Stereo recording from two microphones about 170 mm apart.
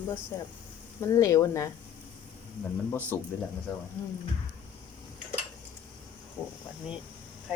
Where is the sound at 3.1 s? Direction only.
15° left (ahead or behind).